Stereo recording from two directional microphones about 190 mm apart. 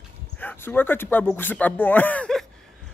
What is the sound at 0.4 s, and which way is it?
Speech, 10° left (ahead or behind).